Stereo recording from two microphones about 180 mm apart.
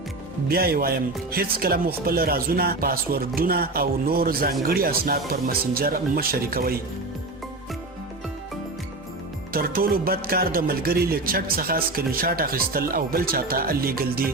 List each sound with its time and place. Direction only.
0.4 s speech: 55° right (ahead or behind)
9.5 s speech: 55° right (ahead or behind)